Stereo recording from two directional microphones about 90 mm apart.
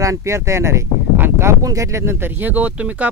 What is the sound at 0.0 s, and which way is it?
Speech, 35° right (ahead or behind).